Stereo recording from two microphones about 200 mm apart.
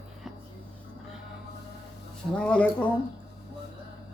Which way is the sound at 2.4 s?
5° left (ahead or behind).